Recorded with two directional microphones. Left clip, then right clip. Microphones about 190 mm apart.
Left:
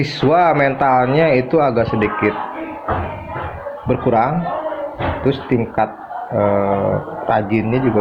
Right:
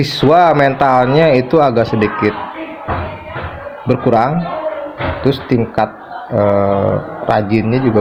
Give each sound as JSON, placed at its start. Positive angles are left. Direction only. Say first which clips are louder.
{"t": 0.0, "sound": "a man's voice", "louder": "right 4 dB", "side_deg": -55}
{"t": 3.8, "sound": "a man's voice", "louder": "right 3 dB", "side_deg": -60}
{"t": 6.3, "sound": "mantra", "louder": "right 3 dB", "side_deg": -55}
{"t": 7.3, "sound": "a man's voice", "louder": "right 3 dB", "side_deg": -55}